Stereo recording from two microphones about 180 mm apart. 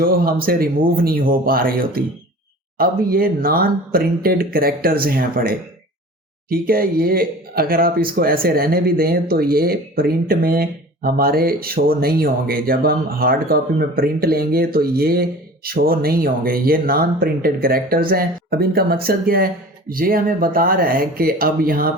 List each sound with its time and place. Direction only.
0.0 s speech: 55° right (ahead or behind)
2.7 s speech: 55° right (ahead or behind)